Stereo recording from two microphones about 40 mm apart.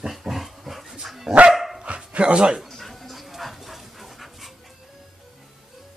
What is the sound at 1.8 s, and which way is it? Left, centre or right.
Dog, right.